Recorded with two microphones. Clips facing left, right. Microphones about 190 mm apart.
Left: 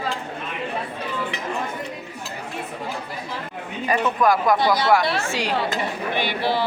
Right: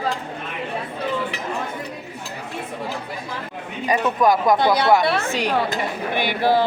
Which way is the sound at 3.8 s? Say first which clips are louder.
Right 2 dB; 20° right (ahead or behind).